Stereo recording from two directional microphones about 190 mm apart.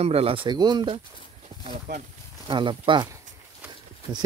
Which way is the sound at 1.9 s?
65° right (ahead or behind).